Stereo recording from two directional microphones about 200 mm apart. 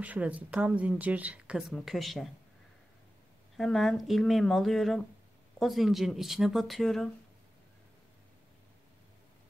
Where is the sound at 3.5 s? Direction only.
Centre (ahead or behind).